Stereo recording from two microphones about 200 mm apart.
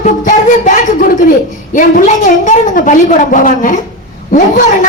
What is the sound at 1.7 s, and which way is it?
A woman's voice, 40° left (ahead or behind).